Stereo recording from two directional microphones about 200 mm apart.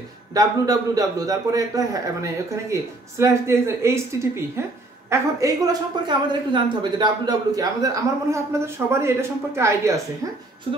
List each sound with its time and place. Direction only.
0.3 s speech: 20° right (ahead or behind)